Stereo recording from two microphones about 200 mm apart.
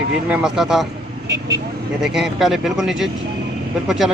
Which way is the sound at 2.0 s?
Centre (ahead or behind).